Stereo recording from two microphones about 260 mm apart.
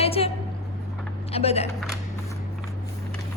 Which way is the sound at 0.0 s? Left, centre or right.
Left.